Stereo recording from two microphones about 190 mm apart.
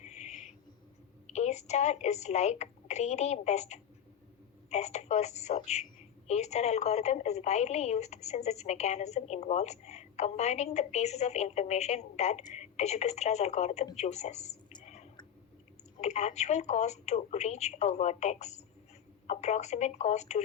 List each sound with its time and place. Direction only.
0.0 s owl: 35° left (ahead or behind)
1.3 s a woman's voice: 35° left (ahead or behind)